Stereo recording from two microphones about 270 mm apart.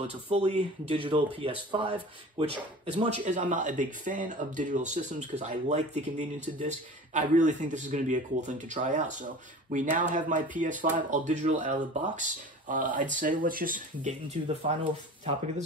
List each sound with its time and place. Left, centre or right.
0.0 s speech: right